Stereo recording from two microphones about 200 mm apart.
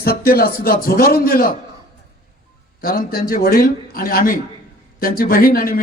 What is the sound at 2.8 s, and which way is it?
A man's voice, 45° left (ahead or behind).